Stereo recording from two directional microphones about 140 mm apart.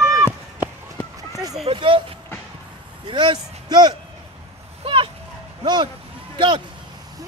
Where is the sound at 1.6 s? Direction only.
40° right (ahead or behind).